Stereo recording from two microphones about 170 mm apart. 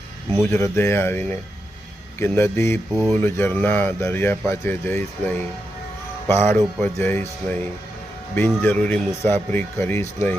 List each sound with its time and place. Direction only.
0.4 s speech: 15° left (ahead or behind)
2.9 s speech: centre (ahead or behind)
3.2 s speech: 15° left (ahead or behind)